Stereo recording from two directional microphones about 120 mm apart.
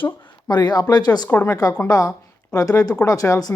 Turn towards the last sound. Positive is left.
turn(degrees=30)  # may be behind; listen again after turning